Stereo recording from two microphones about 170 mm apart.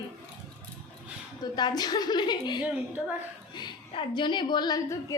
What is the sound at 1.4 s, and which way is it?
A woman's voice, 25° left (ahead or behind).